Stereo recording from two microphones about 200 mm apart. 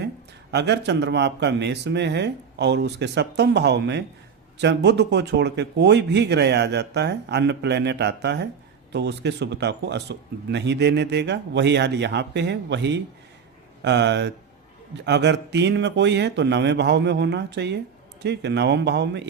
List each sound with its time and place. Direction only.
0.5 s speech: 60° right (ahead or behind)